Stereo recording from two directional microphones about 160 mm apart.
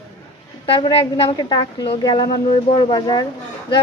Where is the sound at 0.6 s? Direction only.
35° left (ahead or behind).